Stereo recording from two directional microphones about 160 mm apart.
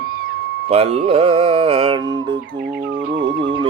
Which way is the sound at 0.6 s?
40° right (ahead or behind).